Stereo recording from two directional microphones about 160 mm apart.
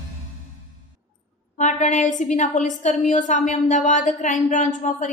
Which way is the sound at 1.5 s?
50° left (ahead or behind).